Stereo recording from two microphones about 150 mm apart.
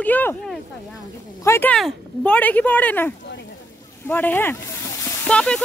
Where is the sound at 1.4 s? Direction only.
20° left (ahead or behind).